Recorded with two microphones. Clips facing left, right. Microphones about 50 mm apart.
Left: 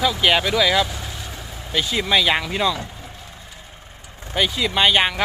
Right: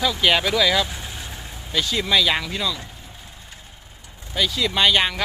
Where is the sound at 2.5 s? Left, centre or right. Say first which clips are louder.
Left 5 dB; left.